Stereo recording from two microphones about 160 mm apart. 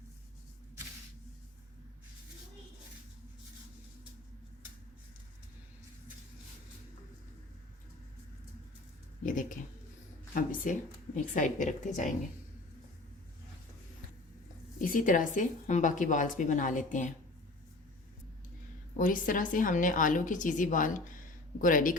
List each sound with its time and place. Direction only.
9.2 s a woman's voice: 55° left (ahead or behind)
14.8 s a woman's voice: 55° left (ahead or behind)
18.9 s speech: 55° left (ahead or behind)